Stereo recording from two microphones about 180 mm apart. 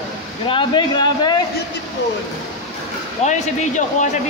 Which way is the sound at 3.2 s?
40° left (ahead or behind).